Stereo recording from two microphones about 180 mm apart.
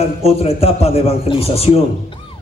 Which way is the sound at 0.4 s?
35° left (ahead or behind).